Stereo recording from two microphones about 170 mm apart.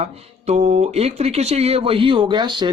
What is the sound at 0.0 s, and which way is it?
Speech, 40° right (ahead or behind).